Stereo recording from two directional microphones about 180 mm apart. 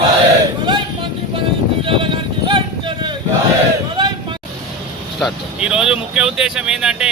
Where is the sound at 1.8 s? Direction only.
30° right (ahead or behind).